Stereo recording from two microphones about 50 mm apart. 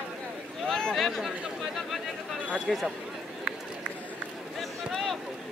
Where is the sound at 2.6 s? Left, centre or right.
Centre.